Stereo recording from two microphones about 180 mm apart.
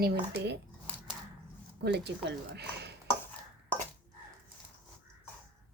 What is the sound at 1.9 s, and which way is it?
Speech, 70° right (ahead or behind).